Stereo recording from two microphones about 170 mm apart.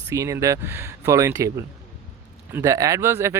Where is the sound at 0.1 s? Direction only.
20° right (ahead or behind).